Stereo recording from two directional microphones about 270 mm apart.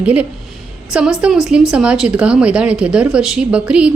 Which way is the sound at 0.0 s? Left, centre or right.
Centre.